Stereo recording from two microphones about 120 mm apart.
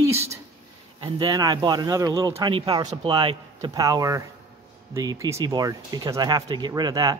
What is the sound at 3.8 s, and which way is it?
Speech, 30° right (ahead or behind).